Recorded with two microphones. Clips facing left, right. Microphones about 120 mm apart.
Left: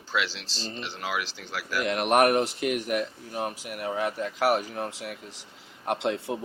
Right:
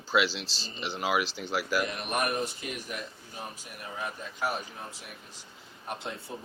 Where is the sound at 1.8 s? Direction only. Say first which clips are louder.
Left 9 dB; 80° left.